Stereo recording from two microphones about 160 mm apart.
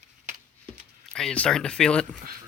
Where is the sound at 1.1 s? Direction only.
5° left (ahead or behind).